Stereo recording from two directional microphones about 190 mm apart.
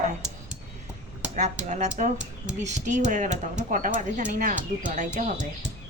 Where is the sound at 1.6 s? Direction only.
40° right (ahead or behind).